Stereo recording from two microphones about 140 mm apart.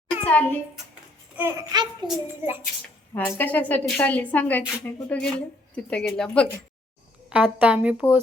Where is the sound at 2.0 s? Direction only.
35° right (ahead or behind).